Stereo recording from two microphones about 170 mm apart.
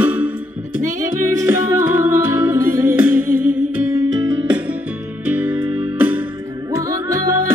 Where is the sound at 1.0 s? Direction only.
20° right (ahead or behind).